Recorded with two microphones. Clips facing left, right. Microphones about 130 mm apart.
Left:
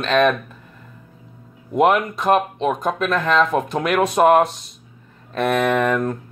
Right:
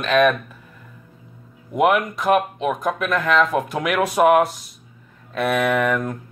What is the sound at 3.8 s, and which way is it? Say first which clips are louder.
Speech: left 3 dB; 30° left (ahead or behind).